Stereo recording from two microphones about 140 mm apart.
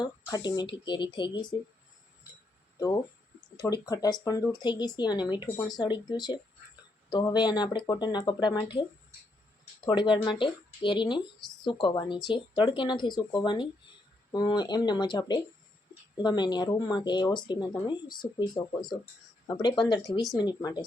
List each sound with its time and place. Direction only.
0.0 s speech: 30° left (ahead or behind)
2.7 s speech: 25° left (ahead or behind)
9.8 s speech: 35° left (ahead or behind)